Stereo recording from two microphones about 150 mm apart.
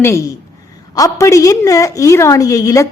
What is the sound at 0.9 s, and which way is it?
A woman's voice, 20° left (ahead or behind).